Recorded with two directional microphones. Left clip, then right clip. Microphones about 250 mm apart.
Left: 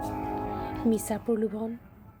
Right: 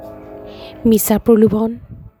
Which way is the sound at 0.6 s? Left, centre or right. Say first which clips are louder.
Right 16 dB; right.